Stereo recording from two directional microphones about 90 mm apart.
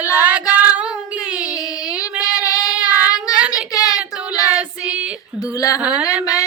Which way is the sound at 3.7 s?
45° left (ahead or behind).